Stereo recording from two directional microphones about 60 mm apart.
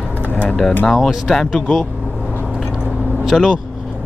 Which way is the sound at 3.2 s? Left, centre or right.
Centre.